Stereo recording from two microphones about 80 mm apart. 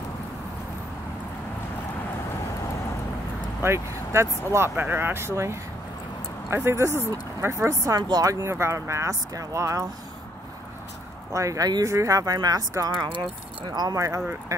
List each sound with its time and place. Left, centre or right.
3.6 s speech: right
4.7 s speech: right
11.3 s speech: right